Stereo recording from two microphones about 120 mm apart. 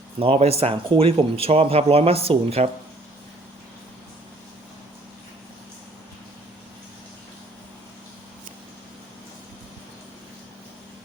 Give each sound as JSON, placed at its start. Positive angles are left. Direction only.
{"t": 0.2, "sound": "speech", "side_deg": -55}